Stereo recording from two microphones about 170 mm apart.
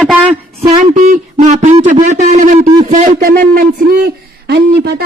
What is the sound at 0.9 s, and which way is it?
A man's voice, 50° right (ahead or behind).